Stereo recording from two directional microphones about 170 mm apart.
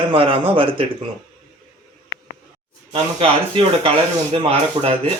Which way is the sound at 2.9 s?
35° right (ahead or behind).